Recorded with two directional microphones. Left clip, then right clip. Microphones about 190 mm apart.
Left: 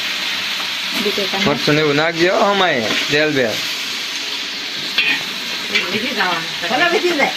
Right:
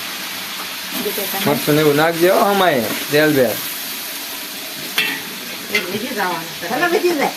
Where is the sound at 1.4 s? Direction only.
15° left (ahead or behind).